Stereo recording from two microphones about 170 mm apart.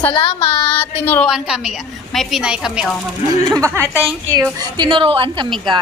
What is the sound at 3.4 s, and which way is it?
A woman's voice, 20° right (ahead or behind).